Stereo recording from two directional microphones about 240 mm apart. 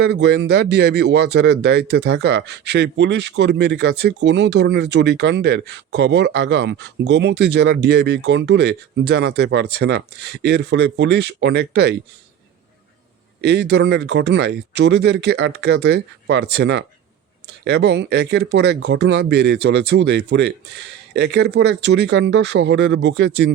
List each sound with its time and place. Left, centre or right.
0.0 s speech: right
13.4 s speech: right